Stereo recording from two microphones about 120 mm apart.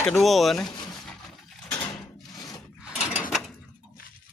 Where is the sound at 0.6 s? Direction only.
35° left (ahead or behind).